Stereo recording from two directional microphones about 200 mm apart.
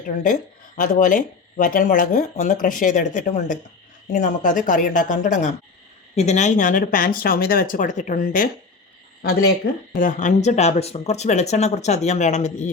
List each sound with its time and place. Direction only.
0.8 s speech: 40° left (ahead or behind)
9.9 s speech: 40° left (ahead or behind)